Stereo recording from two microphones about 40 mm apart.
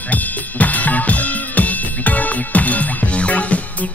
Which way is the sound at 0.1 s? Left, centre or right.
Left.